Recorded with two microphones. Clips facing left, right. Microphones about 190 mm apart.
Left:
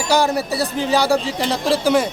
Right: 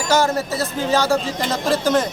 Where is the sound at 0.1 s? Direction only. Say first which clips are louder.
Left 1 dB; 15° left (ahead or behind).